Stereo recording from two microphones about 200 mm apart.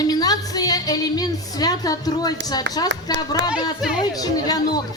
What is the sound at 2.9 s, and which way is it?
Speech, 60° right (ahead or behind).